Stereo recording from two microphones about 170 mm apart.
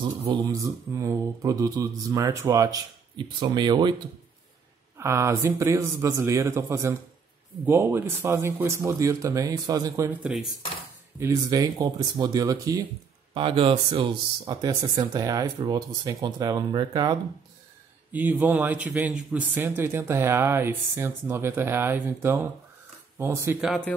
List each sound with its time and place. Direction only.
0.2 s speech: 25° right (ahead or behind)
4.9 s speech: 15° right (ahead or behind)
11.1 s speech: 20° right (ahead or behind)
13.3 s speech: 30° right (ahead or behind)
18.1 s speech: 10° right (ahead or behind)
23.6 s speech: centre (ahead or behind)